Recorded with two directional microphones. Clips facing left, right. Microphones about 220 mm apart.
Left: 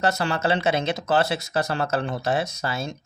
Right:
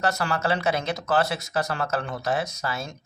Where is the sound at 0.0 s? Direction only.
25° left (ahead or behind).